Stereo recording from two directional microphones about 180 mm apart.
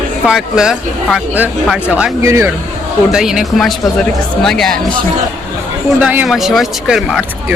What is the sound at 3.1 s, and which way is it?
Speech, 5° right (ahead or behind).